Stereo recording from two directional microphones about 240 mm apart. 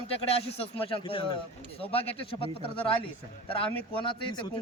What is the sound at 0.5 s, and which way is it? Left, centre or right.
Speech, left.